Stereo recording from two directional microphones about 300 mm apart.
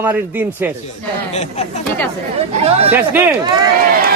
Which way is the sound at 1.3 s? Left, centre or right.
Left.